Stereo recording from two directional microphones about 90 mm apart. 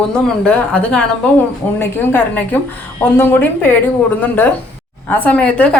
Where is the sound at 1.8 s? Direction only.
25° left (ahead or behind).